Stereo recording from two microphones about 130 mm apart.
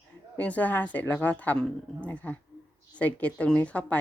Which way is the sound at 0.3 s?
10° left (ahead or behind).